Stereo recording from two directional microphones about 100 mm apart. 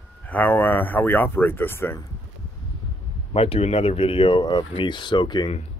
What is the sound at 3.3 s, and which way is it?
Speech, 75° left (ahead or behind).